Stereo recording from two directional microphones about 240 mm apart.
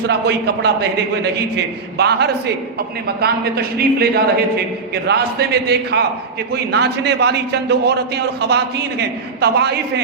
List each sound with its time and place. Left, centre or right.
0.1 s a man's voice: right
2.0 s a man's voice: right